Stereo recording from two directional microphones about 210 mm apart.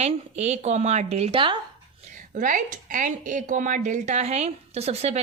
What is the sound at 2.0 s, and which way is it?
A woman's voice, 35° right (ahead or behind).